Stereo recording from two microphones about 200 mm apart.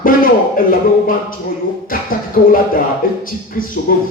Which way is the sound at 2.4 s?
55° left (ahead or behind).